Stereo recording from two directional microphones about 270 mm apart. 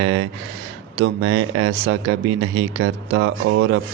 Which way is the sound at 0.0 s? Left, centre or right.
Right.